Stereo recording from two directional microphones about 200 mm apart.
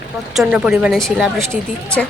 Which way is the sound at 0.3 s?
5° right (ahead or behind).